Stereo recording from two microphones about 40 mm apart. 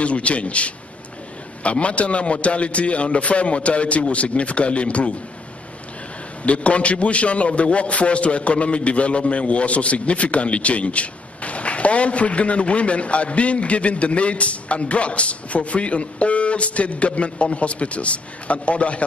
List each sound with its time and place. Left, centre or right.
0.0 s a man's voice: left
6.4 s a man's voice: left